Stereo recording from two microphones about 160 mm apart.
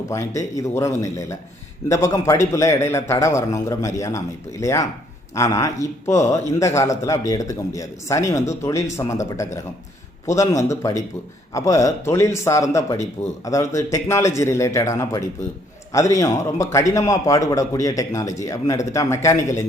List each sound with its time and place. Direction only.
0.1 s speech: 20° left (ahead or behind)